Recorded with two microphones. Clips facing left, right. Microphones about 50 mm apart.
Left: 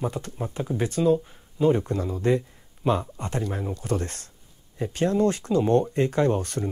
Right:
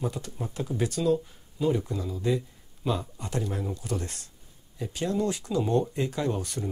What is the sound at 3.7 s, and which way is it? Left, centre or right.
Speech, left.